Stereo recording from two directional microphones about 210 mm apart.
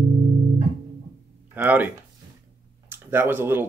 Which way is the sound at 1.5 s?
10° right (ahead or behind).